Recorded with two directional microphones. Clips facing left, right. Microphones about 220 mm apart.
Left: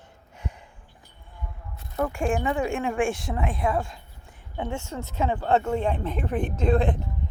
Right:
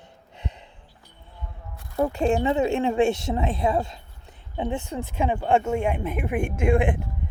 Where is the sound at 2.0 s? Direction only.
25° right (ahead or behind).